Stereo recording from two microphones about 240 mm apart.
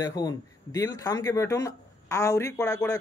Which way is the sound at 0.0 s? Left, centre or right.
Centre.